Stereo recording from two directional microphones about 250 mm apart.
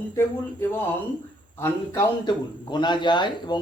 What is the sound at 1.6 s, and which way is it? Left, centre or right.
A man's voice, centre.